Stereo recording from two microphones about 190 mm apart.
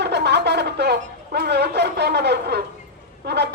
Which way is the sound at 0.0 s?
65° right (ahead or behind).